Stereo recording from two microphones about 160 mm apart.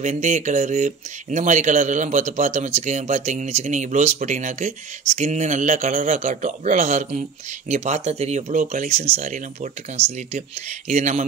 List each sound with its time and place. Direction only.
0.0 s speech: 50° right (ahead or behind)